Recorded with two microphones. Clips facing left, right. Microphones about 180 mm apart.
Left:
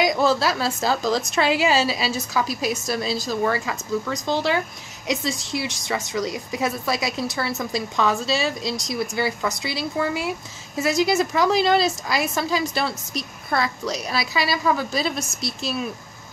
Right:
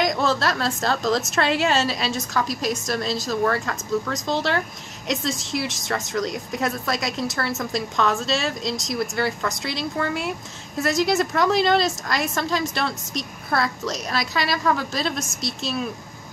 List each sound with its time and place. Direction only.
0.0 s a woman's voice: 5° left (ahead or behind)